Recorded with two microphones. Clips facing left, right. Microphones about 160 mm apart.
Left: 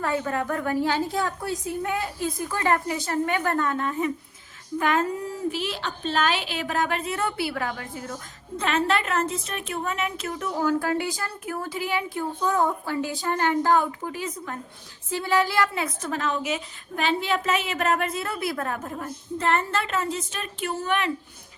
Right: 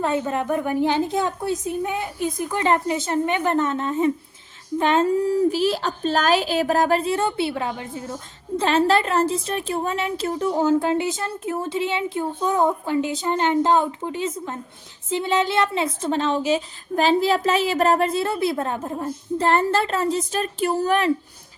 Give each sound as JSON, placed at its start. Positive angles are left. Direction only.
{"t": 0.0, "sound": "a woman's voice", "side_deg": -20}
{"t": 5.5, "sound": "a woman's voice", "side_deg": -40}